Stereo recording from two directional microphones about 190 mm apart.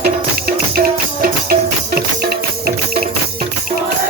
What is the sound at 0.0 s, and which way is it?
Music, 55° right (ahead or behind).